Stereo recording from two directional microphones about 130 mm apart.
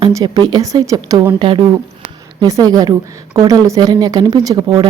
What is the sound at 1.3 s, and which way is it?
Speech, 40° right (ahead or behind).